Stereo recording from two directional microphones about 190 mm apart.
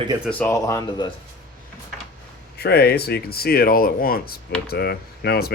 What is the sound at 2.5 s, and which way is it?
Speech, 60° left (ahead or behind).